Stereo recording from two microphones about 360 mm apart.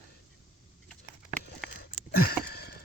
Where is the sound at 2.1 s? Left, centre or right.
Left.